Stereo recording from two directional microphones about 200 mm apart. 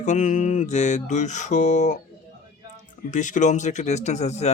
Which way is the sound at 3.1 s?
40° left (ahead or behind).